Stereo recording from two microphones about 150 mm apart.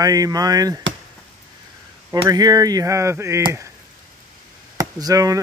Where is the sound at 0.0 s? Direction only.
25° right (ahead or behind).